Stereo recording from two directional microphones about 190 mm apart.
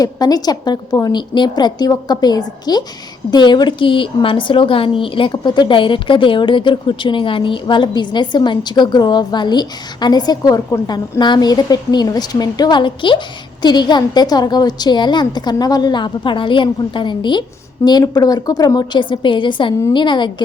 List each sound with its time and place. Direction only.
0.0 s a woman's voice: 20° left (ahead or behind)